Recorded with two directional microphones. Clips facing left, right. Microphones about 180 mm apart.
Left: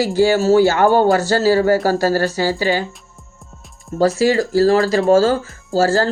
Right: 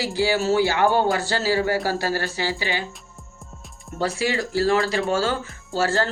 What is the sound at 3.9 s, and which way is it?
Speech, 40° left (ahead or behind).